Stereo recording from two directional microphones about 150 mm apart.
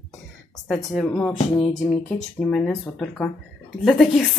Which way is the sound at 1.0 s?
10° left (ahead or behind).